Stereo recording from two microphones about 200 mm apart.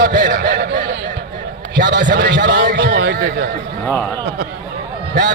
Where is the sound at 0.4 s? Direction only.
60° right (ahead or behind).